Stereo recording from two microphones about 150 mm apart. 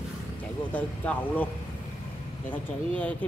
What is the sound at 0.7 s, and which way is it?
Speech, 10° left (ahead or behind).